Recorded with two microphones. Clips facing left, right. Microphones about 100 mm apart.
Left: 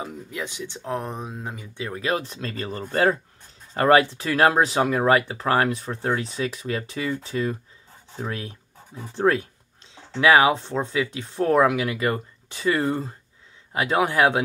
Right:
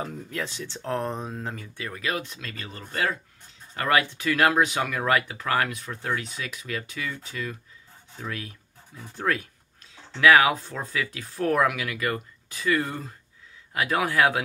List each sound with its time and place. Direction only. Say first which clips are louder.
0.0 s speech: even; 15° left (ahead or behind)